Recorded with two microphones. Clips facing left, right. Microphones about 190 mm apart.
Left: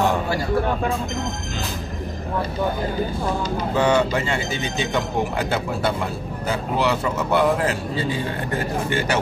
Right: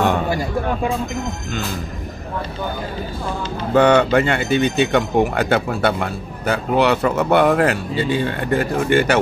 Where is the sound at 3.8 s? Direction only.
65° right (ahead or behind).